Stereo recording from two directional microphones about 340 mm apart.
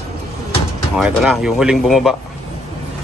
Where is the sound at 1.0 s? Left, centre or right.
Centre.